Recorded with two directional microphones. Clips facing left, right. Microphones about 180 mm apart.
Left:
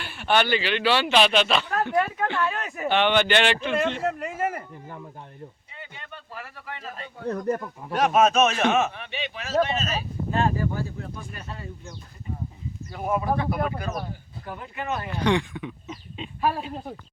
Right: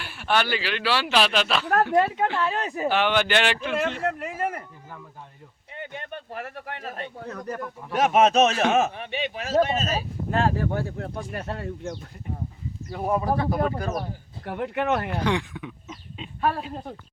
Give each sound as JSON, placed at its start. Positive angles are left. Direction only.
{"t": 0.0, "sound": "speech", "side_deg": -5}
{"t": 1.9, "sound": "speech", "side_deg": -25}
{"t": 2.9, "sound": "speech", "side_deg": -5}
{"t": 5.7, "sound": "a sound", "side_deg": -55}
{"t": 8.2, "sound": "speech", "side_deg": -35}
{"t": 10.3, "sound": "speech", "side_deg": -75}
{"t": 12.9, "sound": "speech", "side_deg": -35}
{"t": 14.4, "sound": "speech", "side_deg": -70}
{"t": 15.2, "sound": "speech", "side_deg": -5}